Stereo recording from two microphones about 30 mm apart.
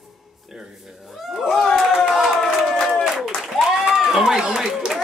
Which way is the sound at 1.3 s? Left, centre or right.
Centre.